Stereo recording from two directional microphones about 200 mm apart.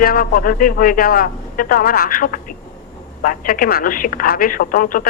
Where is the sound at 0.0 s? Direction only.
45° left (ahead or behind).